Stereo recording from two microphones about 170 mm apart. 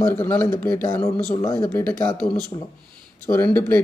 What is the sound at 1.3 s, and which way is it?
Speech, 25° left (ahead or behind).